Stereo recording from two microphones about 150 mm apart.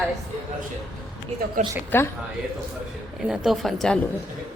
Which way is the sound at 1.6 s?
55° right (ahead or behind).